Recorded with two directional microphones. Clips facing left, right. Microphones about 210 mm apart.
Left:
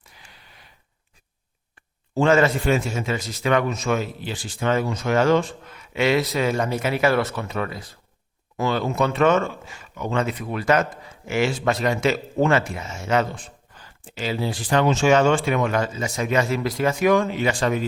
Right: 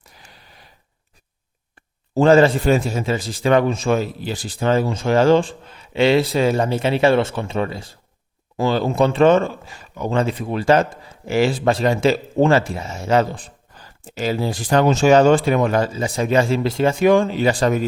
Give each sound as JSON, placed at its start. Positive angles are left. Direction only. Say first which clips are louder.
{"t": 2.1, "sound": "speech", "louder": "right 5 dB", "side_deg": -35}